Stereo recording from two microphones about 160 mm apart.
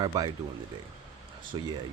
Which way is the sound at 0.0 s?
25° right (ahead or behind).